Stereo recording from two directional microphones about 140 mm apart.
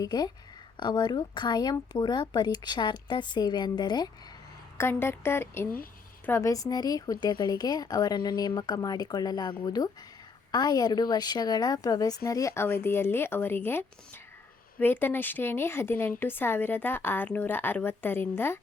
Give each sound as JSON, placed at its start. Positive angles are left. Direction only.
{"t": 0.0, "sound": "a woman's voice", "side_deg": 30}
{"t": 4.8, "sound": "a woman's voice", "side_deg": 15}